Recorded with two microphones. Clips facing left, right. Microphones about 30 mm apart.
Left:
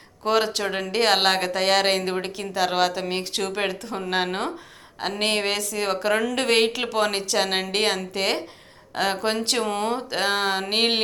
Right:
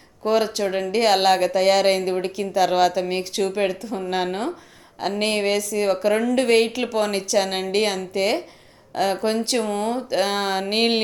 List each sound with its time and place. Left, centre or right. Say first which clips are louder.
0.3 s speech: right 1 dB; left
0.6 s speech: right 3 dB; left
3.3 s a woman's voice: right 6 dB; left
4.0 s speech: right 1 dB; left
5.4 s a woman's voice: right 4 dB; left
6.6 s speech: right 1 dB; left
7.3 s a woman's voice: right 4 dB; left
10.2 s speech: right 1 dB; left